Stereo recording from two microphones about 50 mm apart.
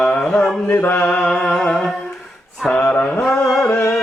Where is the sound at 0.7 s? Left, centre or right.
Left.